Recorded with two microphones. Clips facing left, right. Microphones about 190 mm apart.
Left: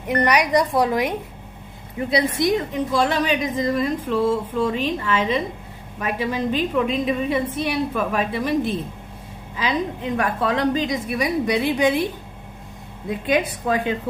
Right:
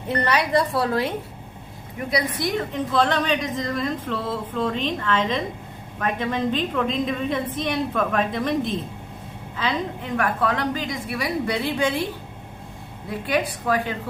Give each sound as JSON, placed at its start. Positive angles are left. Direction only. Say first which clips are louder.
{"t": 0.2, "sound": "a woman's voice", "louder": "left 3 dB", "side_deg": 15}
{"t": 2.0, "sound": "a woman's voice", "louder": "left 4 dB", "side_deg": 25}
{"t": 2.9, "sound": "a woman's voice", "louder": "left 1 dB", "side_deg": 10}
{"t": 13.1, "sound": "a woman's voice", "louder": "left 3 dB", "side_deg": 20}